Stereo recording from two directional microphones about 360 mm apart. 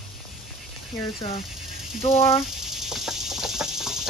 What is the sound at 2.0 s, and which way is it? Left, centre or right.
Speech, centre.